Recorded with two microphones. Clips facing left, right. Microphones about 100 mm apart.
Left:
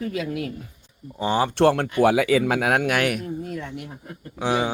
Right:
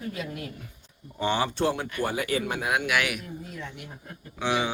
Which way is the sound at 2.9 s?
45° left (ahead or behind).